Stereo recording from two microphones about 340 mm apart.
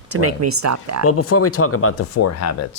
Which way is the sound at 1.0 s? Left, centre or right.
Left.